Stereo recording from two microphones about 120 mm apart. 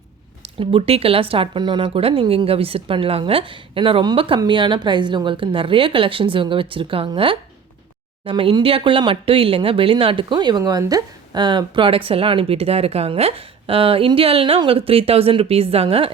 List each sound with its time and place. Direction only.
0.4 s speech: 50° right (ahead or behind)